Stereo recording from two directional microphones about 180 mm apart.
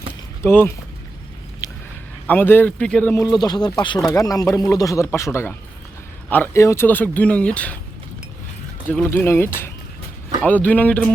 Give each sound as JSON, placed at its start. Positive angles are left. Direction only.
{"t": 0.4, "sound": "speech", "side_deg": 15}
{"t": 1.6, "sound": "a sound", "side_deg": 15}
{"t": 2.2, "sound": "speech", "side_deg": 10}
{"t": 3.2, "sound": "speech", "side_deg": 25}
{"t": 9.0, "sound": "speech", "side_deg": 15}